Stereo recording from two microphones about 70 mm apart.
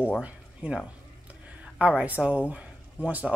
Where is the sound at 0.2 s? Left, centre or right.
Centre.